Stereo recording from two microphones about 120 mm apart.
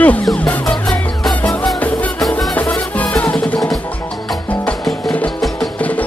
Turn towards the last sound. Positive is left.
turn(degrees=15)  # may be behind; listen again after turning